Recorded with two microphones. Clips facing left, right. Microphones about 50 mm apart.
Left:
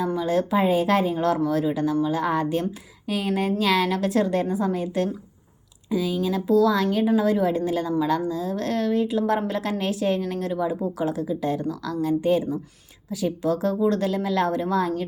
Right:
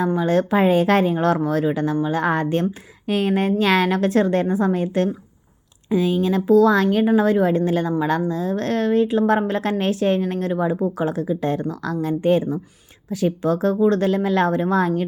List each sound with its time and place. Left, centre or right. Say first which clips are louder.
0.0 s speech: right 4 dB; right